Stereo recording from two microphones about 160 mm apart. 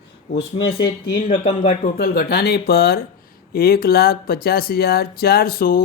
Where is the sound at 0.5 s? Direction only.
35° left (ahead or behind).